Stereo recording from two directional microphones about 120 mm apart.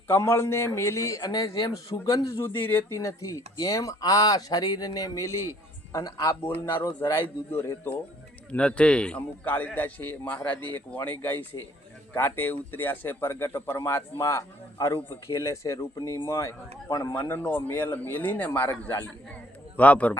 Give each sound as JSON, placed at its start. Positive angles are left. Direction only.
{"t": 0.1, "sound": "speech", "side_deg": 20}
{"t": 8.4, "sound": "a man's voice", "side_deg": 10}
{"t": 17.2, "sound": "a man's voice", "side_deg": 15}